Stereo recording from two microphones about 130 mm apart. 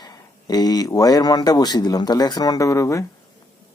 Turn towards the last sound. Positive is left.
turn(degrees=25)  # may be behind; listen again after turning